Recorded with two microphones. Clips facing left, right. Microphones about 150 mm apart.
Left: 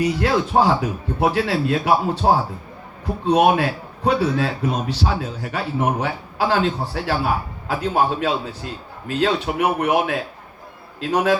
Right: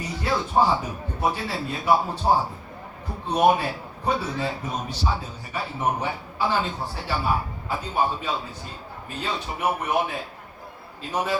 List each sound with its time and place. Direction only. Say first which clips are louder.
0.0 s a man's voice: left 8 dB; 85° left